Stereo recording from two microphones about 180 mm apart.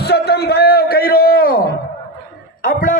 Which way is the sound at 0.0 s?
65° left (ahead or behind).